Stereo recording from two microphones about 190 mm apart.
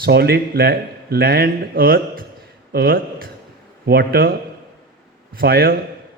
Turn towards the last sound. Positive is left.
turn(degrees=-55)  # may be behind; listen again after turning